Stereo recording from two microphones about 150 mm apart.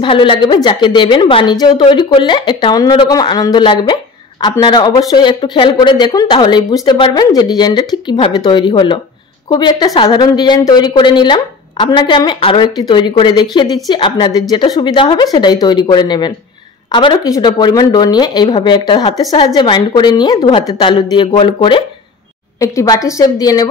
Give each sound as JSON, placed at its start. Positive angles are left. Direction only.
{"t": 0.0, "sound": "a woman's voice", "side_deg": 35}
{"t": 22.6, "sound": "a woman's voice", "side_deg": 20}